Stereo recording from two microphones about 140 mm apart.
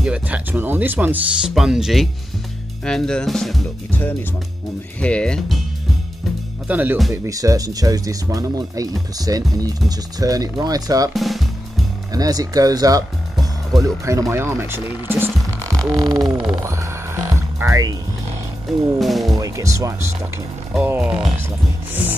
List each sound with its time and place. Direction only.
0.0 s speech: 10° right (ahead or behind)
1.5 s drum: 5° right (ahead or behind)
5.0 s speech: 10° left (ahead or behind)
6.7 s speech: 10° right (ahead or behind)
7.2 s speech: 25° right (ahead or behind)
11.1 s drum: centre (ahead or behind)
12.1 s speech: 25° right (ahead or behind)
15.9 s speech: 30° right (ahead or behind)
16.6 s music: 20° right (ahead or behind)
18.9 s music: centre (ahead or behind)
19.3 s speech: 25° right (ahead or behind)
20.7 s speech: 10° right (ahead or behind)
21.4 s music: 15° right (ahead or behind)